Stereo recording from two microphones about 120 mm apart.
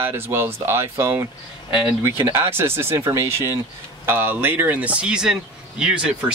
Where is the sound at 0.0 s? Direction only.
20° right (ahead or behind).